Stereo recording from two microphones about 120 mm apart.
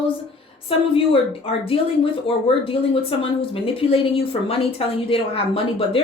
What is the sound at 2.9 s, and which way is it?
Speech, 50° left (ahead or behind).